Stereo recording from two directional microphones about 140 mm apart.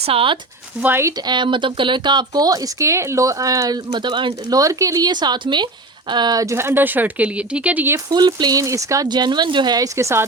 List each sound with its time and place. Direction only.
0.0 s speech: 40° right (ahead or behind)
0.8 s speech: 15° right (ahead or behind)
1.1 s speech: 30° right (ahead or behind); by 8.0 s 15° right (ahead or behind)
8.1 s speech: 30° right (ahead or behind)